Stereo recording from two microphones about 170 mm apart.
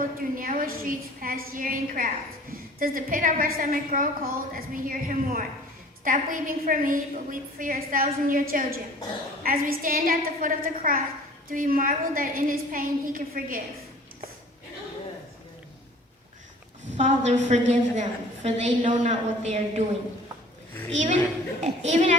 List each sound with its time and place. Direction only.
0.2 s a woman's voice: 55° right (ahead or behind)
17.0 s a woman's voice: 45° right (ahead or behind)
21.6 s a woman's voice: 40° right (ahead or behind)